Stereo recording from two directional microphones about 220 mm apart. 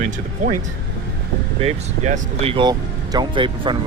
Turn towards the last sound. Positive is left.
turn(degrees=-20)  # may be behind; listen again after turning